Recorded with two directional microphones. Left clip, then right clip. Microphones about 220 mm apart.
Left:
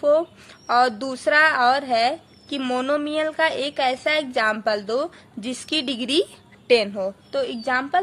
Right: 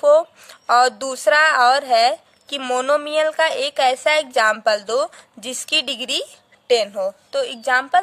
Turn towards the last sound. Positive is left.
turn(degrees=-40)  # may be behind; listen again after turning